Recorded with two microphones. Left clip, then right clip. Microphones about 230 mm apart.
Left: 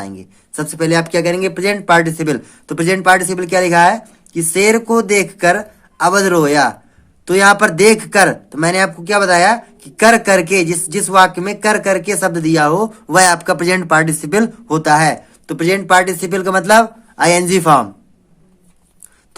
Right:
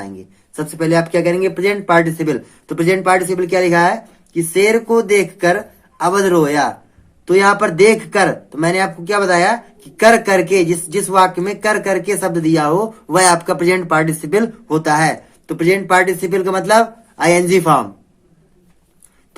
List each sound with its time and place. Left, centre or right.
0.5 s a man's voice: left